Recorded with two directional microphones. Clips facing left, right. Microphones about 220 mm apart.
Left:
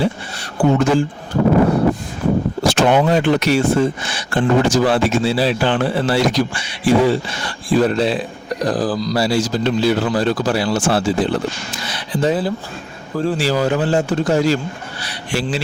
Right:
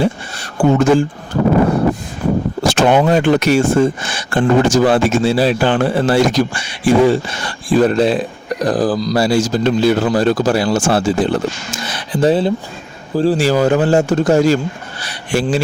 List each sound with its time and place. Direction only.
0.0 s speech: 50° right (ahead or behind)
2.6 s speech: 50° right (ahead or behind)
12.3 s a man's voice: 25° right (ahead or behind)
13.4 s speech: 50° right (ahead or behind)